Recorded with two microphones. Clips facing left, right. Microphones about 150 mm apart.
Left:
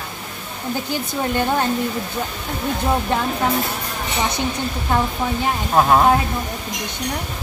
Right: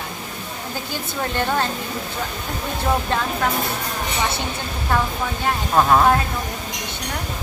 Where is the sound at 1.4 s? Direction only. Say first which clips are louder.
Left 1 dB; 15° left (ahead or behind).